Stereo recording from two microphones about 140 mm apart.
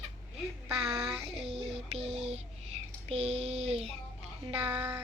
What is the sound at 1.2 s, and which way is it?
Child singing, 45° right (ahead or behind).